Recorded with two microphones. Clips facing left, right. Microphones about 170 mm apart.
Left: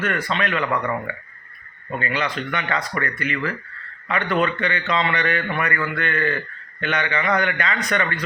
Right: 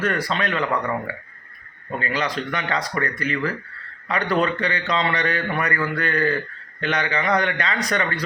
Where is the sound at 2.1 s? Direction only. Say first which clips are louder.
Right 1 dB; 35° right (ahead or behind).